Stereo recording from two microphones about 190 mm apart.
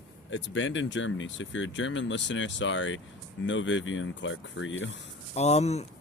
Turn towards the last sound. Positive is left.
turn(degrees=35)  # may be behind; listen again after turning